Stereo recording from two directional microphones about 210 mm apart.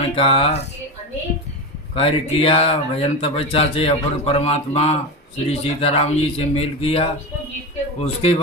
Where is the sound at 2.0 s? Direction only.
30° left (ahead or behind).